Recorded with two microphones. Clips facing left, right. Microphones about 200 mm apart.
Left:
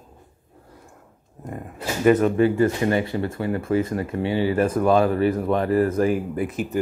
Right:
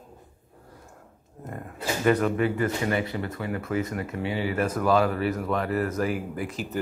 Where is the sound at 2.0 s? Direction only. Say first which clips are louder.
Left 6 dB; 25° left (ahead or behind).